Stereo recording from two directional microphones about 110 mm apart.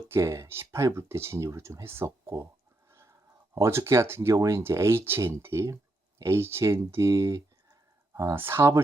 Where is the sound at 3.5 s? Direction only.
25° right (ahead or behind).